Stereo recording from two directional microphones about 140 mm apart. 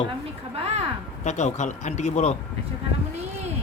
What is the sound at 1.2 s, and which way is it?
Speech, 55° left (ahead or behind).